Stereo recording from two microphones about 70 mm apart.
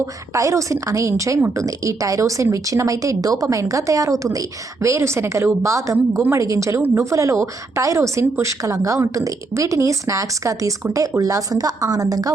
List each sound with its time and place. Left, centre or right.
0.3 s a woman's voice: right